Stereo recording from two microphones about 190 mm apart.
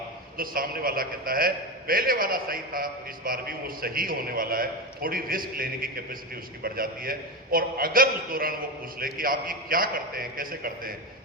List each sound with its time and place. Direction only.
0.3 s a man's voice: 50° right (ahead or behind)